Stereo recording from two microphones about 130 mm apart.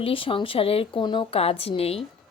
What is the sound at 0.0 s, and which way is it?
A woman's voice, 45° left (ahead or behind).